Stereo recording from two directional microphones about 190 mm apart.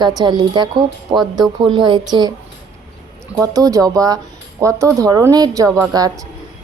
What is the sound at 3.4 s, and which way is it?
A woman's voice, 20° right (ahead or behind).